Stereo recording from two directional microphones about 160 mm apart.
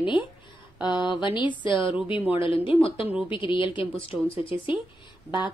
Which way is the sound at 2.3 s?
35° left (ahead or behind).